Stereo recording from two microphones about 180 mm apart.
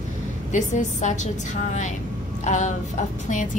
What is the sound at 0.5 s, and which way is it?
Speech, 45° left (ahead or behind).